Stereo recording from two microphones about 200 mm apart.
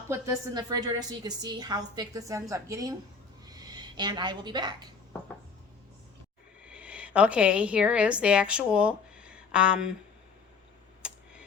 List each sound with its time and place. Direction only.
0.1 s a woman's voice: 15° right (ahead or behind)
6.7 s a woman's voice: 5° right (ahead or behind)
11.0 s a sound: 5° right (ahead or behind)